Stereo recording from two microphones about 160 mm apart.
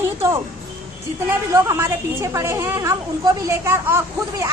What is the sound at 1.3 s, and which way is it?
A woman's voice, 15° right (ahead or behind).